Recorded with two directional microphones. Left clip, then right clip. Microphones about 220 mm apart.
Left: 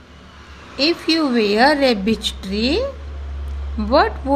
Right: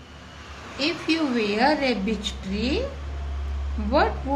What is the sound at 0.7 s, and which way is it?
A woman's voice, 45° left (ahead or behind).